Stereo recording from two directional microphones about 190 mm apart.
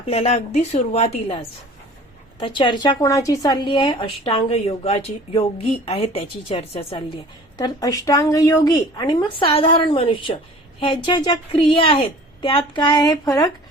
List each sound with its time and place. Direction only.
0.1 s a woman's voice: 30° left (ahead or behind)
7.6 s a woman's voice: 20° left (ahead or behind)